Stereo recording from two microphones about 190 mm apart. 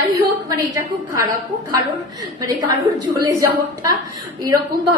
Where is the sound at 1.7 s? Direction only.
20° right (ahead or behind).